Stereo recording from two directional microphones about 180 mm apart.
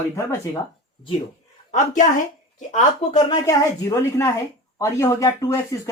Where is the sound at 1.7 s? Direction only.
45° left (ahead or behind).